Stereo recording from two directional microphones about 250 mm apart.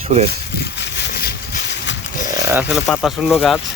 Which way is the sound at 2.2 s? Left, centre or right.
Centre.